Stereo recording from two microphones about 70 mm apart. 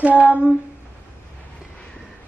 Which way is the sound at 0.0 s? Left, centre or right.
Right.